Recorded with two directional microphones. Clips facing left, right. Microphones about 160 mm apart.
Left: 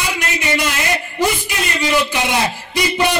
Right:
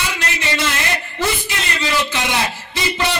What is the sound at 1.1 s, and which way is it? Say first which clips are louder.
A man's voice: left 3 dB; 15° left (ahead or behind).